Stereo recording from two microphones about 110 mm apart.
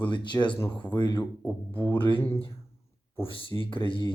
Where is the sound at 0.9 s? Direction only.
40° left (ahead or behind).